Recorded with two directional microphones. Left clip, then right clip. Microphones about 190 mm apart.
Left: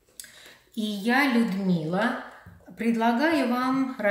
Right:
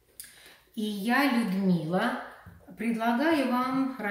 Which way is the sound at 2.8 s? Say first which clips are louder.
Left 4 dB; 30° left (ahead or behind).